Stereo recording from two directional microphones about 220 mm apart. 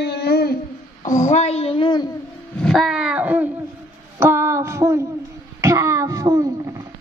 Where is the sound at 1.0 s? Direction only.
35° left (ahead or behind).